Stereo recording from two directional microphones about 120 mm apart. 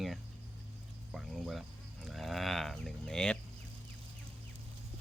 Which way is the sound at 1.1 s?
Centre (ahead or behind).